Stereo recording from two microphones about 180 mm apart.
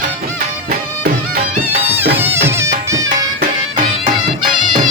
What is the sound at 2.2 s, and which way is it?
Music, 10° right (ahead or behind).